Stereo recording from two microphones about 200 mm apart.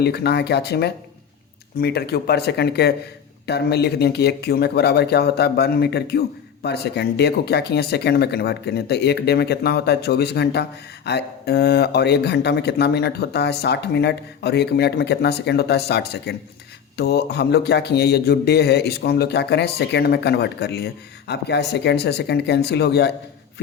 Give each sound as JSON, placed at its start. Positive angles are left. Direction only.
{"t": 0.0, "sound": "a man's voice", "side_deg": 55}